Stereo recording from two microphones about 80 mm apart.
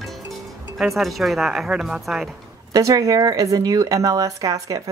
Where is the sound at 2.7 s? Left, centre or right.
Right.